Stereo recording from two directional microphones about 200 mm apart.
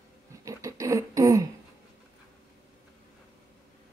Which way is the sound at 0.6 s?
15° right (ahead or behind).